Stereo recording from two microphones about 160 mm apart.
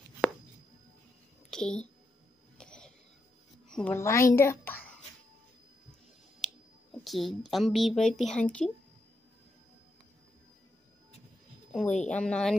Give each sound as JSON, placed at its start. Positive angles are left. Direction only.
{"t": 1.5, "sound": "a woman's voice", "side_deg": 5}
{"t": 2.5, "sound": "throat clearing", "side_deg": 5}
{"t": 3.6, "sound": "a sound", "side_deg": 5}
{"t": 3.9, "sound": "a woman's voice", "side_deg": 20}
{"t": 6.4, "sound": "speech", "side_deg": 0}
{"t": 11.7, "sound": "speech", "side_deg": 5}